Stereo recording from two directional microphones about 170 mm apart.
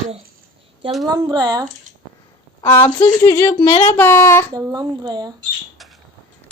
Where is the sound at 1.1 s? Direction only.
25° right (ahead or behind).